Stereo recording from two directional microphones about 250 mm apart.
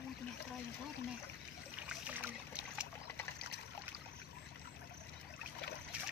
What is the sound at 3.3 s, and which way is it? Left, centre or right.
Water, left.